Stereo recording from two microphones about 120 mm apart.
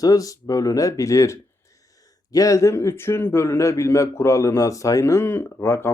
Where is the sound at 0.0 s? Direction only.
30° left (ahead or behind).